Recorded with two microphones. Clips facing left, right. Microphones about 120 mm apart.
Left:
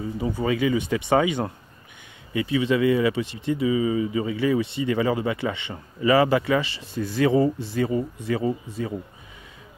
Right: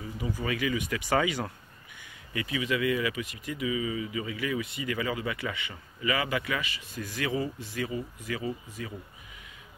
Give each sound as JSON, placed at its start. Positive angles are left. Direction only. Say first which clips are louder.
{"t": 0.0, "sound": "speech", "louder": "left 8 dB", "side_deg": 30}